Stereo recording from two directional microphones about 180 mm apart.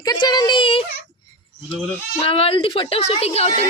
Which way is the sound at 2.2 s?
35° left (ahead or behind).